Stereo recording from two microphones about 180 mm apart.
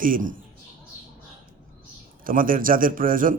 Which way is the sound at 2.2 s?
50° right (ahead or behind).